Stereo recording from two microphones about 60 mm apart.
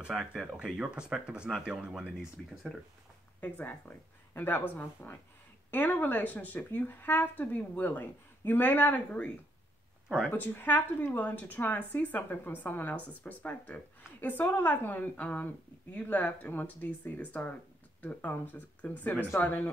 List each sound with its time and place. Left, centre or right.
0.1 s speech: centre
2.4 s speech: centre
3.3 s speech: left
10.3 s speech: left